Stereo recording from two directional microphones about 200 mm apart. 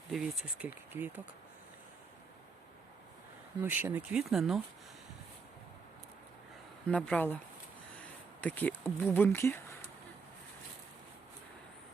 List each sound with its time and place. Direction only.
0.1 s speech: 5° right (ahead or behind)
3.6 s speech: 10° right (ahead or behind)
6.8 s speech: 5° left (ahead or behind)